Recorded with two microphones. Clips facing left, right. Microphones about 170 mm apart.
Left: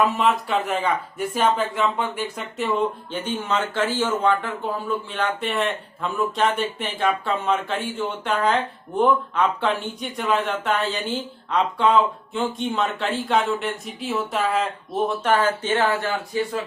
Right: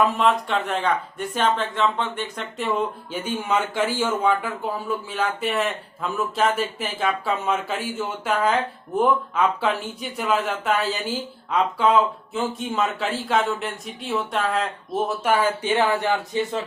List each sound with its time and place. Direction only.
0.0 s speech: centre (ahead or behind); by 16.6 s 20° right (ahead or behind)